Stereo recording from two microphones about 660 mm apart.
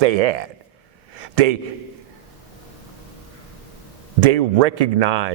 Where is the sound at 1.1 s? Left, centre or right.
Right.